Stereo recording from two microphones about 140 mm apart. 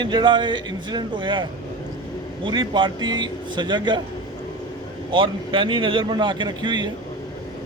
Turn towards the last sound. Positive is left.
turn(degrees=-35)  # may be behind; listen again after turning